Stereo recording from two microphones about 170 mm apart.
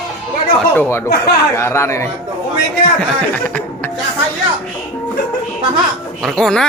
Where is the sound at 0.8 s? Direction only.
15° left (ahead or behind).